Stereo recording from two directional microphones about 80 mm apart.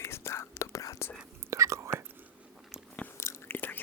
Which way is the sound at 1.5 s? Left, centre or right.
Right.